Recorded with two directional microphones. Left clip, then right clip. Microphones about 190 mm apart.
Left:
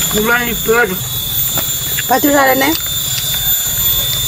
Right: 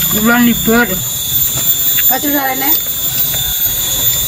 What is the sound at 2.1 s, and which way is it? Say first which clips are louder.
Speech: left 7 dB; 45° left (ahead or behind).